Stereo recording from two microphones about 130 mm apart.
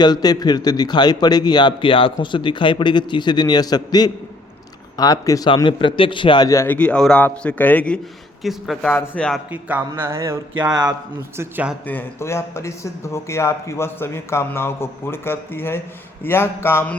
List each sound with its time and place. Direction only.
0.0 s a man's voice: 30° left (ahead or behind)
5.6 s a man's voice: 40° left (ahead or behind)
6.5 s speech: 20° left (ahead or behind)
6.7 s a man's voice: 10° left (ahead or behind)
8.4 s a man's voice: centre (ahead or behind)
9.5 s speech: 10° right (ahead or behind)
10.0 s a sound: 20° right (ahead or behind)
10.6 s speech: 30° right (ahead or behind)
11.3 s speech: 15° right (ahead or behind)
11.9 s speech: 15° left (ahead or behind)